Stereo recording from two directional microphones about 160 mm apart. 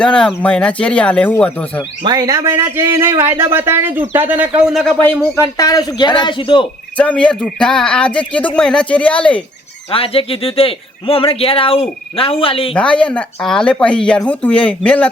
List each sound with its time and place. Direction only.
0.0 s speech: 5° left (ahead or behind)
2.0 s speech: 25° right (ahead or behind); by 4.9 s centre (ahead or behind)
5.3 s a man's voice: 20° left (ahead or behind)
6.9 s speech: 10° left (ahead or behind)
9.9 s speech: 35° left (ahead or behind)
12.7 s speech: 5° left (ahead or behind)